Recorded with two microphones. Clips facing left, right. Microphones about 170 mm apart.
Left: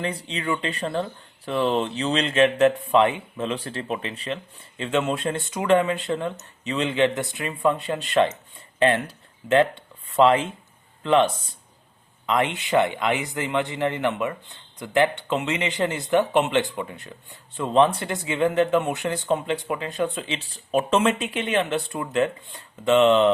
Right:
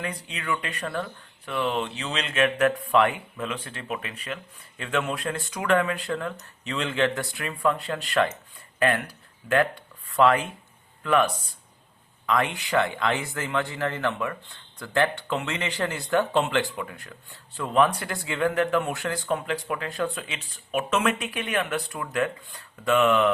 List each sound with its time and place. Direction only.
0.0 s speech: 25° left (ahead or behind)